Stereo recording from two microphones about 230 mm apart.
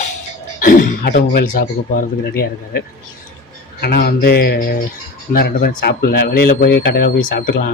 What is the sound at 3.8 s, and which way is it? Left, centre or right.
Speech, left.